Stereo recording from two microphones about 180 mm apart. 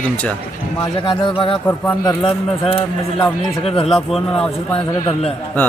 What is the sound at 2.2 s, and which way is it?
Speech, 30° left (ahead or behind).